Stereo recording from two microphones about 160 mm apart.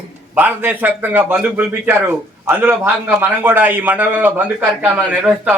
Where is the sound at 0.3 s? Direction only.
10° right (ahead or behind).